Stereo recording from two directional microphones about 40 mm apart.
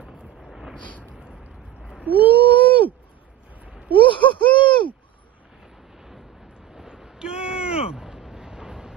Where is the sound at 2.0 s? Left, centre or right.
Right.